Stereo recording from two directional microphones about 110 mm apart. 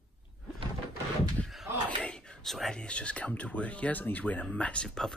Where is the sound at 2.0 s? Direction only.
10° left (ahead or behind).